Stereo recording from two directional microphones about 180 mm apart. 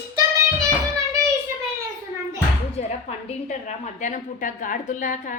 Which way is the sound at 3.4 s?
45° left (ahead or behind).